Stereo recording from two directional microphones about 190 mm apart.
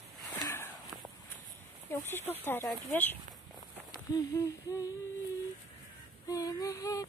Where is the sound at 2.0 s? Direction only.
10° left (ahead or behind).